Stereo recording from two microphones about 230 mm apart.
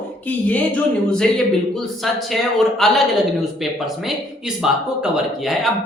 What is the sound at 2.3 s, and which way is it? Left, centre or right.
Speech, centre.